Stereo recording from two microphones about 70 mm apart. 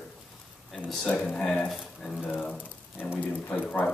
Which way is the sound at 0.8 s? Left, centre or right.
Centre.